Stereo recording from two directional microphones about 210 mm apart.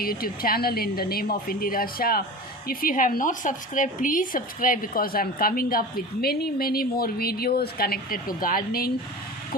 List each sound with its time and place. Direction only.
0.0 s a woman's voice: 45° left (ahead or behind)